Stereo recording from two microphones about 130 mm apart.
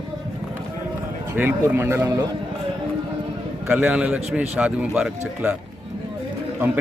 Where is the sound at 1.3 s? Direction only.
15° right (ahead or behind).